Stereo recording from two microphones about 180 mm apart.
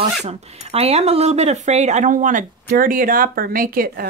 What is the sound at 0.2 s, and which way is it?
Speech, 35° right (ahead or behind).